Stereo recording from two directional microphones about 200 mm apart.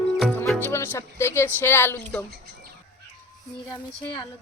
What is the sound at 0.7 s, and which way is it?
Speech, 15° left (ahead or behind).